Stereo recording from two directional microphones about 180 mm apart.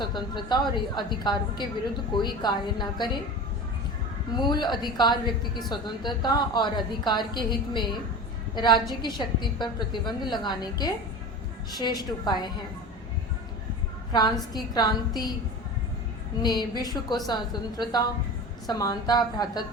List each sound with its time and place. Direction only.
0.0 s a woman's voice: 25° left (ahead or behind)
4.4 s a woman's voice: 25° left (ahead or behind)
14.1 s a woman's voice: 25° left (ahead or behind)
16.4 s a woman's voice: 25° left (ahead or behind)